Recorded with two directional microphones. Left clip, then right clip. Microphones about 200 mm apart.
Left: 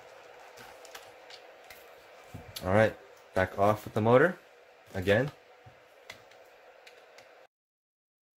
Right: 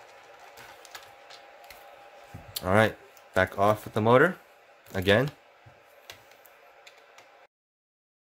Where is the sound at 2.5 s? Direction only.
10° right (ahead or behind).